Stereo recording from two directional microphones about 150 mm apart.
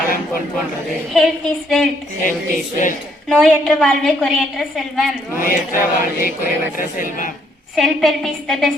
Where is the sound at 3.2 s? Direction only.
5° left (ahead or behind).